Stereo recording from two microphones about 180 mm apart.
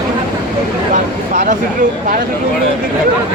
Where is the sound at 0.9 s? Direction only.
45° right (ahead or behind).